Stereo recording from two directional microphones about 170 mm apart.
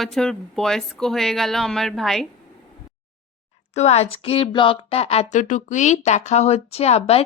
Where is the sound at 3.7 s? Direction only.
40° left (ahead or behind).